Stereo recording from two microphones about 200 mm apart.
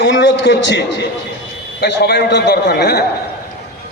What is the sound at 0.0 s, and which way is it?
Speech, 65° left (ahead or behind).